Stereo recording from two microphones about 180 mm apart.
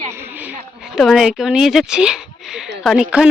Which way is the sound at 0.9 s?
Centre (ahead or behind).